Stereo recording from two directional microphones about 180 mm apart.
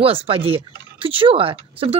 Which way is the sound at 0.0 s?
30° right (ahead or behind).